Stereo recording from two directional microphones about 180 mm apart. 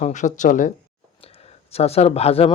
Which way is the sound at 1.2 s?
35° left (ahead or behind).